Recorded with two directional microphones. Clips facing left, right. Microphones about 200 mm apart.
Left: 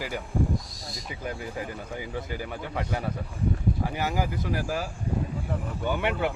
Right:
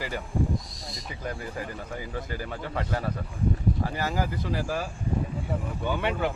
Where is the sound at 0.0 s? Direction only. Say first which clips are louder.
Left 1 dB; 5° left (ahead or behind).